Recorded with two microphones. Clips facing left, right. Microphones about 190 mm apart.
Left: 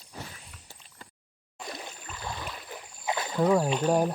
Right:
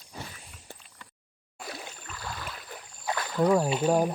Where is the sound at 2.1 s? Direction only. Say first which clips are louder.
Left 2 dB; 20° left (ahead or behind).